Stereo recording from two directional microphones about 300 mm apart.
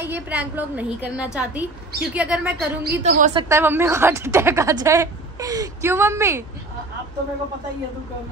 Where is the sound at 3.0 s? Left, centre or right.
Right.